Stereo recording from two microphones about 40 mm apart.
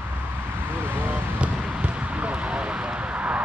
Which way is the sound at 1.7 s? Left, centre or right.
Right.